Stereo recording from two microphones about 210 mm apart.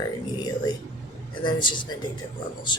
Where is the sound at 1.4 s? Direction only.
20° left (ahead or behind).